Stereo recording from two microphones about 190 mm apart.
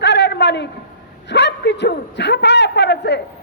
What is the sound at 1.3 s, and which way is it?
A man's voice, 65° left (ahead or behind).